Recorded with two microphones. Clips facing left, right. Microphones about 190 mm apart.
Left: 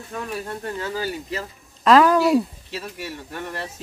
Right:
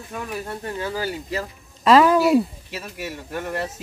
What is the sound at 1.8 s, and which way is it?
Speech, 5° right (ahead or behind).